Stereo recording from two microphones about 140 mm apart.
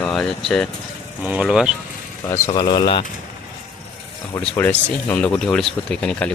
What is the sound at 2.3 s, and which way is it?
Speech, 20° left (ahead or behind).